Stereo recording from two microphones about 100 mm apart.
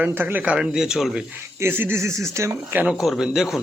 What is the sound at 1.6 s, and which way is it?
Speech, 25° right (ahead or behind).